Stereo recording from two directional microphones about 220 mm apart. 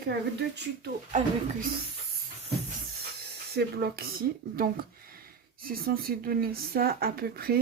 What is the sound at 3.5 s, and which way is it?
Speech, 45° right (ahead or behind).